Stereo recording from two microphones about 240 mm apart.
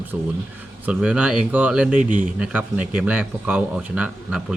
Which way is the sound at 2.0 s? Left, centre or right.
Right.